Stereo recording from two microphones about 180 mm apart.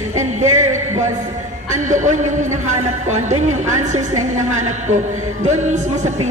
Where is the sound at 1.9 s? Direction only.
40° right (ahead or behind).